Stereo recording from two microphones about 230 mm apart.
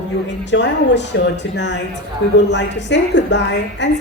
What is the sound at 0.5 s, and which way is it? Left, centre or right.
A woman's voice, left.